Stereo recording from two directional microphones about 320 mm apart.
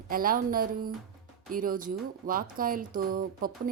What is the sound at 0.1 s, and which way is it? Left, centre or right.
Speech, right.